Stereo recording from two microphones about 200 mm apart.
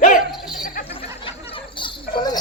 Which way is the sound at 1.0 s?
25° left (ahead or behind).